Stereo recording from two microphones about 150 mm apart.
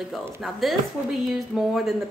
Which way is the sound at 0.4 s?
Centre (ahead or behind).